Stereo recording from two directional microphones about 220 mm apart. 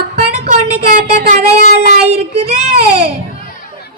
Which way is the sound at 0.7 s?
45° right (ahead or behind).